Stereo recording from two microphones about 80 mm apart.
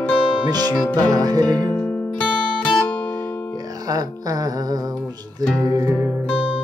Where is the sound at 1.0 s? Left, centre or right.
Right.